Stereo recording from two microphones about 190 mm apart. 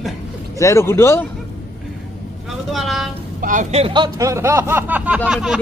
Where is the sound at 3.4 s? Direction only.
40° right (ahead or behind); by 5.6 s 5° right (ahead or behind).